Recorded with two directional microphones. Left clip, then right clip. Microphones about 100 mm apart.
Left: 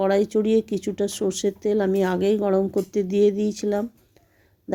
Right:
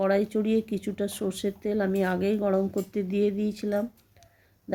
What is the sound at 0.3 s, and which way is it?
Speech, 30° left (ahead or behind).